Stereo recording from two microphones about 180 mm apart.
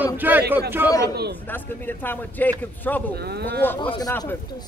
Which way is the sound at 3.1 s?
60° right (ahead or behind).